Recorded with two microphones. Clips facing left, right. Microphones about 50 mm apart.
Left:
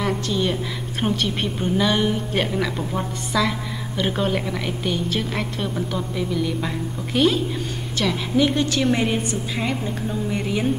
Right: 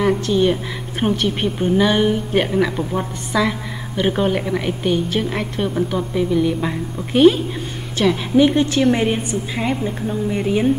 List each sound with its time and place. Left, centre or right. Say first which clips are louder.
0.0 s a woman's voice: right 6 dB; centre